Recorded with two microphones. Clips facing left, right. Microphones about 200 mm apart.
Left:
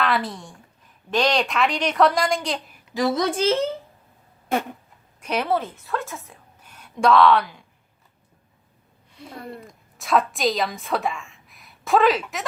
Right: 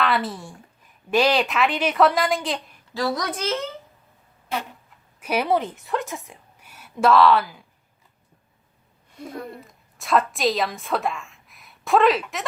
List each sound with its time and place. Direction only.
0.0 s a woman's voice: centre (ahead or behind)
2.9 s a woman's voice: 20° left (ahead or behind)
5.2 s a woman's voice: 10° right (ahead or behind)
9.2 s speech: 45° right (ahead or behind)
9.6 s a woman's voice: centre (ahead or behind)